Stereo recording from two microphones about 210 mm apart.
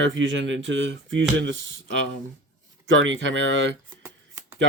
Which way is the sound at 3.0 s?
65° right (ahead or behind).